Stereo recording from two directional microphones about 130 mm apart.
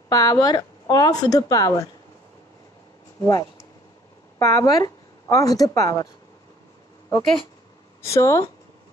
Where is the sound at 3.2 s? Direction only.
25° left (ahead or behind).